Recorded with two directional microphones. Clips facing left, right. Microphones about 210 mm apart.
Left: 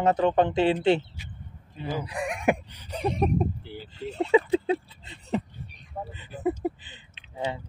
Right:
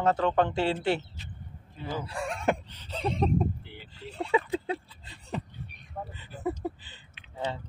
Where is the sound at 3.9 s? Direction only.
20° left (ahead or behind).